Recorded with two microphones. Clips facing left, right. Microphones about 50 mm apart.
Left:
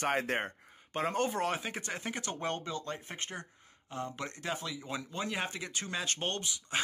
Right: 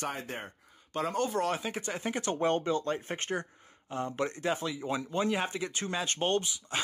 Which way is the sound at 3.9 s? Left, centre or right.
Right.